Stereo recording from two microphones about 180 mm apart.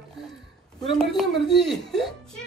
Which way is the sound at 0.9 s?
Centre (ahead or behind).